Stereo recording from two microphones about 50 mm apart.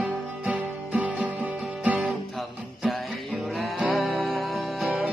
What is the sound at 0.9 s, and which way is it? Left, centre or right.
Music, right.